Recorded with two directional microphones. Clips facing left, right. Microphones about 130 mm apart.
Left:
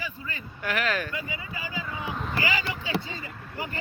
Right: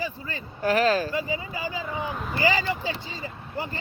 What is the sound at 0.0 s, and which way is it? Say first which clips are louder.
Speech: right 5 dB; 35° right (ahead or behind).